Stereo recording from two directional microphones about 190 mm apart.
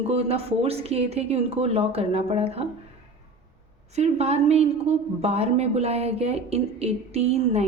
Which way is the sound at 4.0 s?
35° right (ahead or behind).